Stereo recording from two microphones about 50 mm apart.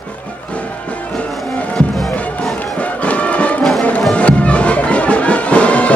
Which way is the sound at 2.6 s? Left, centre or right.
Left.